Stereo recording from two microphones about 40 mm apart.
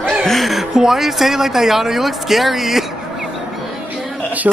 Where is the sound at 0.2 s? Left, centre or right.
Centre.